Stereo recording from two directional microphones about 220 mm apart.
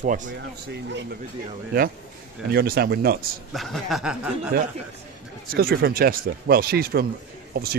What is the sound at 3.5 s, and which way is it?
Speech, centre (ahead or behind).